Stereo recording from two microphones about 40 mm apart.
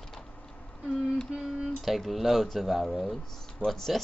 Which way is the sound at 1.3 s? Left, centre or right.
Right.